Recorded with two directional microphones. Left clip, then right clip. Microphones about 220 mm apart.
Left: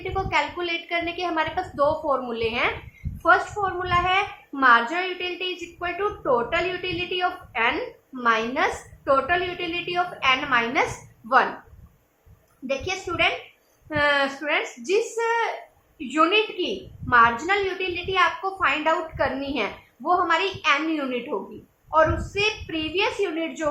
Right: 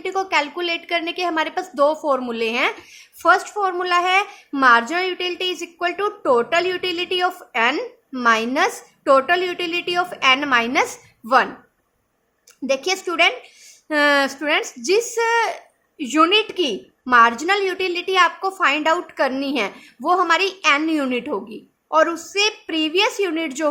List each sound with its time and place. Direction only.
0.0 s a woman's voice: 50° right (ahead or behind)
12.6 s a woman's voice: 50° right (ahead or behind)